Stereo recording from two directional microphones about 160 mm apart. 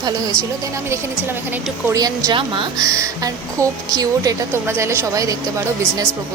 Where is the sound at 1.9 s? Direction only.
20° right (ahead or behind).